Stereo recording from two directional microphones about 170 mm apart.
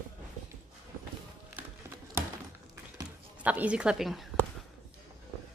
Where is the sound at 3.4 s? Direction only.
10° right (ahead or behind).